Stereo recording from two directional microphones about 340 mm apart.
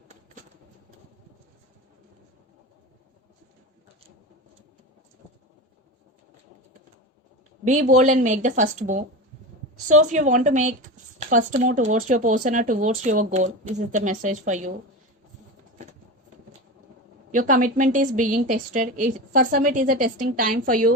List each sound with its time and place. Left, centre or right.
7.6 s speech: right
17.3 s speech: right